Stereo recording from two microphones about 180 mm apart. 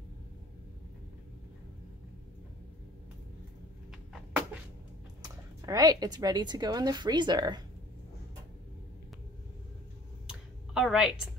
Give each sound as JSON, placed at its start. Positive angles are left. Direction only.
{"t": 5.2, "sound": "speech", "side_deg": -20}
{"t": 10.7, "sound": "a woman's voice", "side_deg": 0}